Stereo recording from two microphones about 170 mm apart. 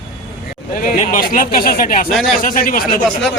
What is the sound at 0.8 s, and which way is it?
Speech, 50° left (ahead or behind).